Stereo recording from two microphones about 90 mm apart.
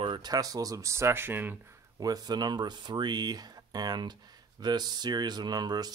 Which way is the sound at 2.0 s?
45° right (ahead or behind).